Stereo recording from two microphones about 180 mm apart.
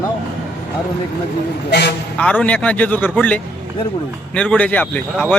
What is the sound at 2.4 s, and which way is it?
A man's voice, 10° left (ahead or behind).